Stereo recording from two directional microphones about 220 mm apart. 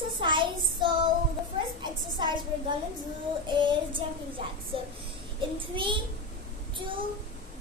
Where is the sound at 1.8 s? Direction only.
20° right (ahead or behind).